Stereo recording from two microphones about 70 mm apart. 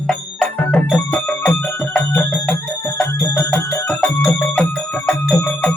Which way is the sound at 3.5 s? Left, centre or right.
Left.